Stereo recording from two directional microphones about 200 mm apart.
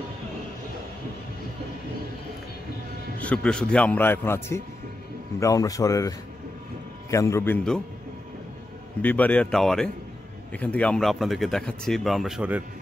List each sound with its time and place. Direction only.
3.2 s a man's voice: 5° left (ahead or behind)
9.0 s speech: 10° left (ahead or behind)